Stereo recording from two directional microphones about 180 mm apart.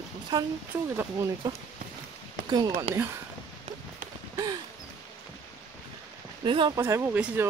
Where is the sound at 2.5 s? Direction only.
20° right (ahead or behind).